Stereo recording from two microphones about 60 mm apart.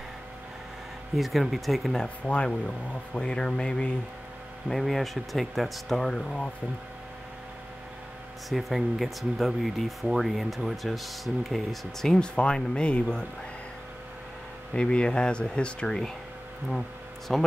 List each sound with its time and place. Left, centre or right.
1.1 s speech: centre
2.2 s speech: centre
4.6 s speech: centre
8.5 s speech: centre
14.7 s speech: centre
17.3 s speech: centre